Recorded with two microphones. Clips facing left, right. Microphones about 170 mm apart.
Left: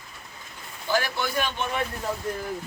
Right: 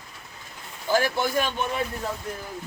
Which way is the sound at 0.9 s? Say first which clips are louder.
Right 3 dB; 45° right (ahead or behind).